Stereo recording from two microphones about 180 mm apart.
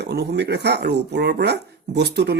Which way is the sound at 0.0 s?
65° right (ahead or behind).